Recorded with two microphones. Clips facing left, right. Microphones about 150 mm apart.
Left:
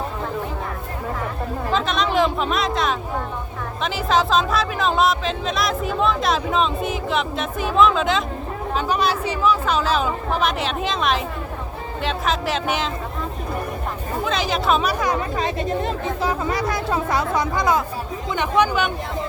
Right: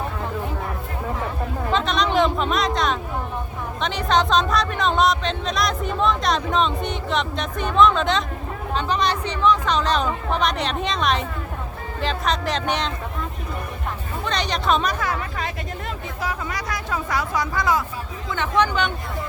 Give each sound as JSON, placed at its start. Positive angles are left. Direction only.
{"t": 1.7, "sound": "a sound", "side_deg": 0}
{"t": 3.8, "sound": "speech", "side_deg": 5}
{"t": 14.3, "sound": "speech", "side_deg": 5}